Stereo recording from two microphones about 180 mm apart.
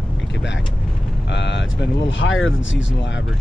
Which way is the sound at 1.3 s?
85° left.